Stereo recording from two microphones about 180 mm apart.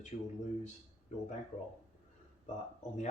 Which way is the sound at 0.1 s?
40° left (ahead or behind).